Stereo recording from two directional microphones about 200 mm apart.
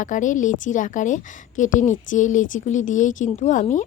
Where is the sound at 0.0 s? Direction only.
40° left (ahead or behind).